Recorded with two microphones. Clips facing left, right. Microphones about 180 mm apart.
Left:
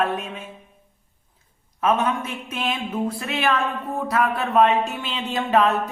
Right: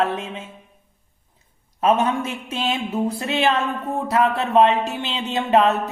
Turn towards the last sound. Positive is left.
turn(degrees=-25)  # may be behind; listen again after turning